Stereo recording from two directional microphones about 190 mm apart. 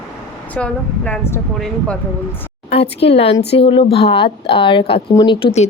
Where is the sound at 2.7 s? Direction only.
30° left (ahead or behind).